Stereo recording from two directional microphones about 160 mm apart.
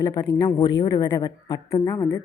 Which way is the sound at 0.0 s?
25° left (ahead or behind).